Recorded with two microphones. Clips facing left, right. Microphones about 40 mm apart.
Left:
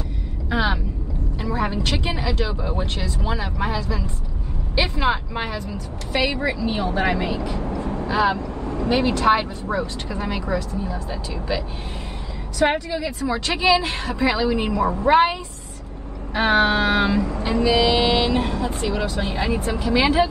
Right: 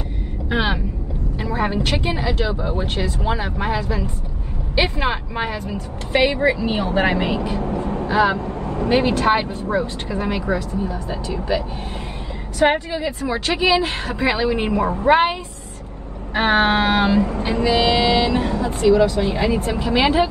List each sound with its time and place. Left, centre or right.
0.5 s speech: right
1.4 s vehicle: right
1.9 s a woman's voice: right
16.3 s a woman's voice: right
17.9 s vehicle: left
18.9 s a woman's voice: right